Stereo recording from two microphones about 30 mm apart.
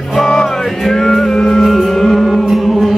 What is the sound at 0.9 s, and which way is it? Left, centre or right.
Music, centre.